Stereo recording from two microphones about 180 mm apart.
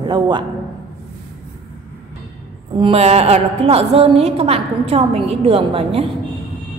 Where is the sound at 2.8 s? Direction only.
35° right (ahead or behind).